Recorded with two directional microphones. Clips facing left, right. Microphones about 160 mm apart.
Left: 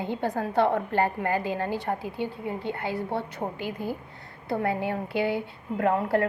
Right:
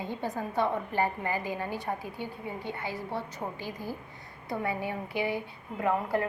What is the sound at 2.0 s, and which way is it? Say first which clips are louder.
Speech: left 6 dB; 25° left (ahead or behind).